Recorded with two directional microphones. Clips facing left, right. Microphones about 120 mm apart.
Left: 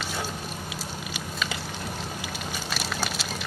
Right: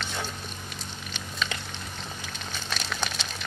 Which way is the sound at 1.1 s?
5° left (ahead or behind).